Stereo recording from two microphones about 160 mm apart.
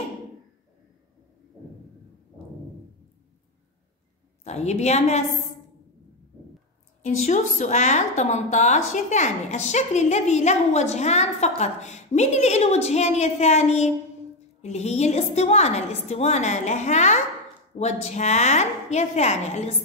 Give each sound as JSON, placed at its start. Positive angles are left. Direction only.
{"t": 4.5, "sound": "a woman's voice", "side_deg": 45}
{"t": 7.0, "sound": "a woman's voice", "side_deg": 45}